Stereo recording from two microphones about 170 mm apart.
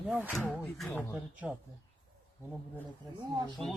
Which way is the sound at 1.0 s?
10° right (ahead or behind).